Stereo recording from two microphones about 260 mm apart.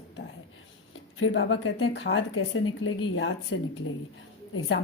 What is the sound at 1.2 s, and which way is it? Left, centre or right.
Speech, left.